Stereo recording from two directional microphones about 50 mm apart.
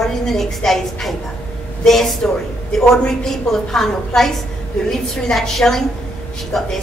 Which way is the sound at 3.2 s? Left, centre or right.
Centre.